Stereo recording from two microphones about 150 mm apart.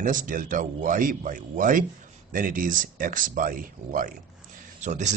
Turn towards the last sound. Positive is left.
turn(degrees=-55)  # may be behind; listen again after turning